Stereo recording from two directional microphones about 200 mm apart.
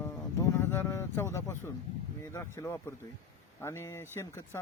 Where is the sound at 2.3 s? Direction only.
15° left (ahead or behind).